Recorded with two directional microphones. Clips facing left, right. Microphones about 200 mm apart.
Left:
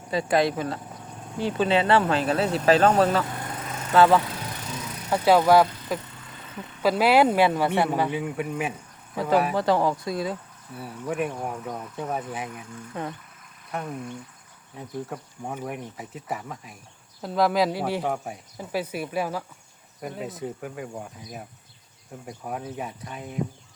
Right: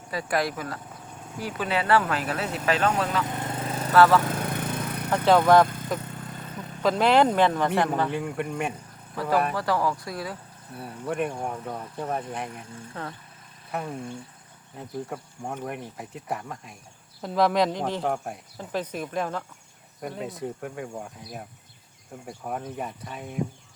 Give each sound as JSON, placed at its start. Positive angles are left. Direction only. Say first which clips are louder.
{"t": 0.1, "sound": "speech", "louder": "left 5 dB", "side_deg": 25}
{"t": 3.6, "sound": "vehicle", "louder": "right 5 dB", "side_deg": -30}
{"t": 3.9, "sound": "speech", "louder": "even", "side_deg": 20}
{"t": 4.2, "sound": "vehicle", "louder": "right 6 dB", "side_deg": -50}
{"t": 5.1, "sound": "speech", "louder": "left 1 dB", "side_deg": 10}
{"t": 6.1, "sound": "vehicle", "louder": "right 6 dB", "side_deg": -50}
{"t": 6.8, "sound": "speech", "louder": "left 1 dB", "side_deg": 5}
{"t": 9.6, "sound": "speech", "louder": "left 4 dB", "side_deg": 20}
{"t": 10.8, "sound": "speech", "louder": "even", "side_deg": 0}
{"t": 13.8, "sound": "speech", "louder": "even", "side_deg": -30}
{"t": 14.8, "sound": "speech", "louder": "even", "side_deg": 0}